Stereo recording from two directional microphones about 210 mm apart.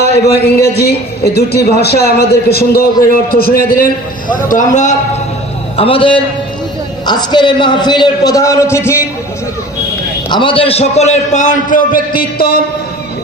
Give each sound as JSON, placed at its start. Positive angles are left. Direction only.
{"t": 0.8, "sound": "a man's voice", "side_deg": 50}
{"t": 10.2, "sound": "a man's voice", "side_deg": 25}